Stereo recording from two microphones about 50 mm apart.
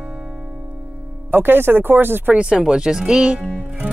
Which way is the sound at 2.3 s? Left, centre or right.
Centre.